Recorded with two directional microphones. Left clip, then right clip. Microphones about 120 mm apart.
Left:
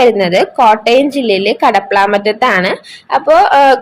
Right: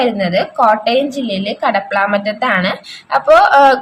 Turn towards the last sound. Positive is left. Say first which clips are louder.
# left 1 dB
turn(degrees=25)  # may be behind; listen again after turning